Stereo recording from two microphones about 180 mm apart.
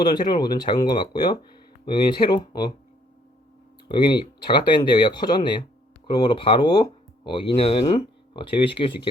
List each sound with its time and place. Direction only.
0.0 s speech: 25° left (ahead or behind)
3.8 s speech: 25° left (ahead or behind)